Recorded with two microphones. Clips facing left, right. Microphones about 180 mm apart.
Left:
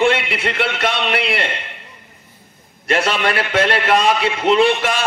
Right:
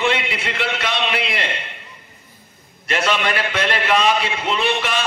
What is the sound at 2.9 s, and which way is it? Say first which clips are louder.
A man's voice: left 3 dB; 45° left (ahead or behind).